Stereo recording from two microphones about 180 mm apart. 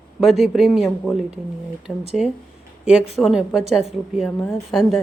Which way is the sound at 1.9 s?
10° left (ahead or behind).